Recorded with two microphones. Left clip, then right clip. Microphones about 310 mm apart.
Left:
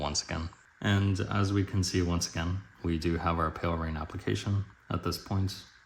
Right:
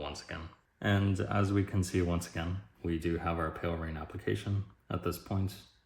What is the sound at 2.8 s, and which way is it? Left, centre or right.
Speech, centre.